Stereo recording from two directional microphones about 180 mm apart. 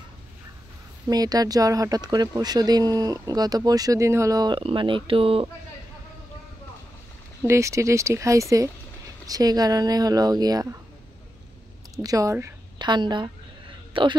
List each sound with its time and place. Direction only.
1.0 s speech: 20° right (ahead or behind)
7.4 s speech: 15° right (ahead or behind)
11.9 s speech: 20° right (ahead or behind)